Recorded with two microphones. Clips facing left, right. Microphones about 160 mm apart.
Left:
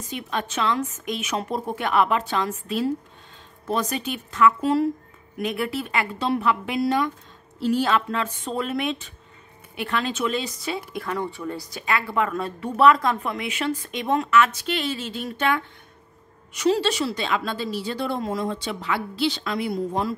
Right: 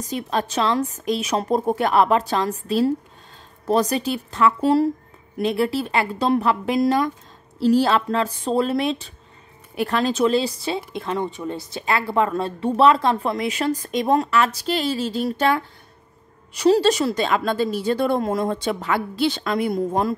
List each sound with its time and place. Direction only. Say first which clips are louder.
0.0 s a woman's voice: right 5 dB; 35° right (ahead or behind)